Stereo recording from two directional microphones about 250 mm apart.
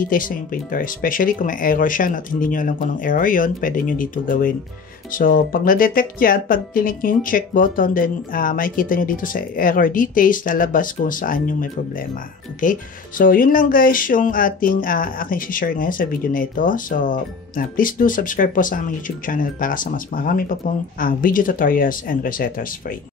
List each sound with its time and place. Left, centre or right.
0.0 s speech: left